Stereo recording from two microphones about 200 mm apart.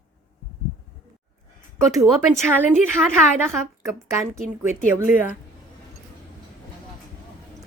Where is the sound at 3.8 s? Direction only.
15° right (ahead or behind).